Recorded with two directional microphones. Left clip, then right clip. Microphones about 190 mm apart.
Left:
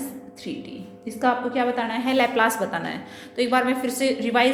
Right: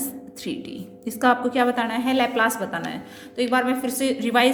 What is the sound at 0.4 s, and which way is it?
A woman's voice, 35° right (ahead or behind).